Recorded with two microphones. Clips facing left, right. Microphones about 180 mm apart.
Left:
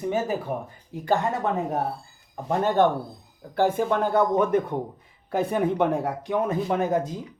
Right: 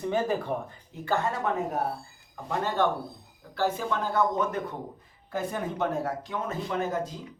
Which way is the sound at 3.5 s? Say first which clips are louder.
Left 6 dB; 55° left (ahead or behind).